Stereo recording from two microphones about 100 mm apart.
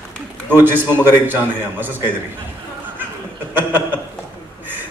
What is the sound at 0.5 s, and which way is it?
A man's voice, 20° right (ahead or behind).